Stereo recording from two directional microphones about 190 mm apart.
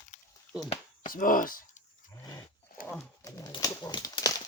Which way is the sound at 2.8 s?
45° left (ahead or behind).